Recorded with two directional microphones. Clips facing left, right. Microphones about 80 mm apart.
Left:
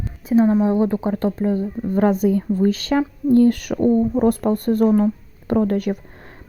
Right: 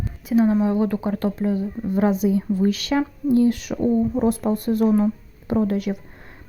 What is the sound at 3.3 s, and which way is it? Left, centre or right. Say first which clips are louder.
Speech: left 4 dB; left.